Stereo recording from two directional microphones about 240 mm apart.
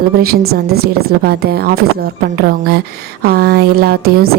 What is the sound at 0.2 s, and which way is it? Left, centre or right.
A woman's voice, right.